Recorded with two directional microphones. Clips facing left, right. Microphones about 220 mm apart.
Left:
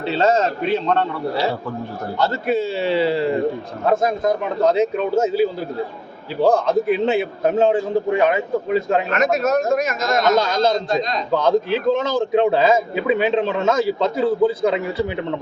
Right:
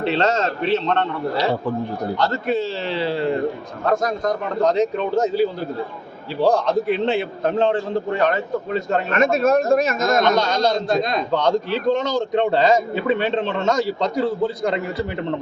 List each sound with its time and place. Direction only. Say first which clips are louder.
0.2 s a man's voice: left 2 dB; 10° left (ahead or behind)
2.1 s a man's voice: left 3 dB; 5° left (ahead or behind)
6.5 s a man's voice: left 2 dB; 5° left (ahead or behind)
9.1 s speech: right 4 dB; 30° right (ahead or behind)
10.2 s a man's voice: left 1 dB; 5° left (ahead or behind)
10.8 s a man's voice: right 1 dB; 55° right (ahead or behind)
11.3 s a man's voice: left 6 dB; 5° left (ahead or behind)